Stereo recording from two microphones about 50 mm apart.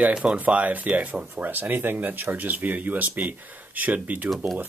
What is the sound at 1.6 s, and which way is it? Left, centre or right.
Speech, right.